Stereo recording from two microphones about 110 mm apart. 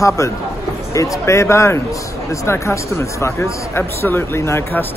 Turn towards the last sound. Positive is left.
turn(degrees=25)  # may be behind; listen again after turning